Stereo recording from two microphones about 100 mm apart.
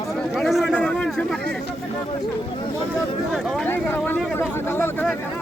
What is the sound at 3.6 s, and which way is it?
Speech, 20° left (ahead or behind).